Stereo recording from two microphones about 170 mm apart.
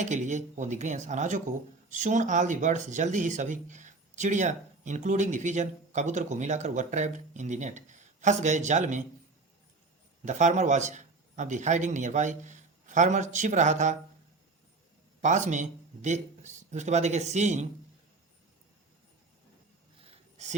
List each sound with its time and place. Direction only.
0.0 s speech: 45° right (ahead or behind)
10.2 s a man's voice: 45° right (ahead or behind)
15.2 s speech: 45° right (ahead or behind)
20.0 s a sound: 40° right (ahead or behind)